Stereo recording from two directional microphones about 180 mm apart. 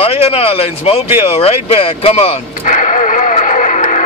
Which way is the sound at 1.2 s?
30° left (ahead or behind).